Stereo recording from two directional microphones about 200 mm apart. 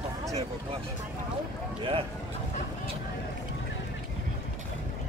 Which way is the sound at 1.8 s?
30° right (ahead or behind).